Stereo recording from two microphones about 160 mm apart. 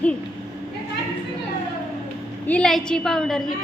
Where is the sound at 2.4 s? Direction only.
5° left (ahead or behind).